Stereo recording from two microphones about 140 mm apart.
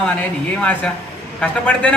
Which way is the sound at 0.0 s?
10° left (ahead or behind).